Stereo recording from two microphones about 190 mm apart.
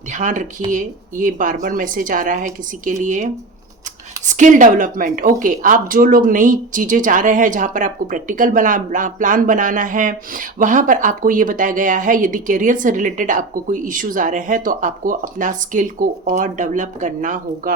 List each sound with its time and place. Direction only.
0.1 s a woman's voice: 40° right (ahead or behind)
4.3 s a woman's voice: 40° right (ahead or behind)